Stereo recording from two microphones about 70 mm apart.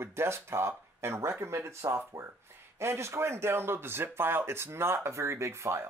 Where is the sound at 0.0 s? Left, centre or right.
Right.